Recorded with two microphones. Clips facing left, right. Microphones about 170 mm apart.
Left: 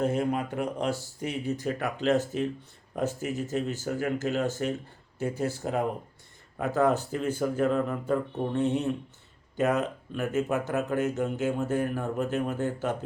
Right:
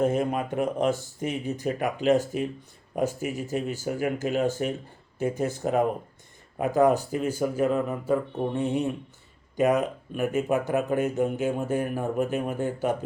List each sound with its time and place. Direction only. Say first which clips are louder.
0.0 s speech: right 2 dB; 20° right (ahead or behind)